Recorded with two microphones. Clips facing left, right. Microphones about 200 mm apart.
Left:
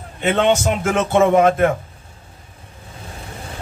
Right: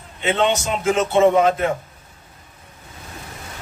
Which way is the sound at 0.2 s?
50° left (ahead or behind).